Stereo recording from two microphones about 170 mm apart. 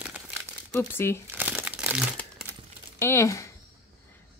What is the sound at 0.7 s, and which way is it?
Speech, 15° left (ahead or behind).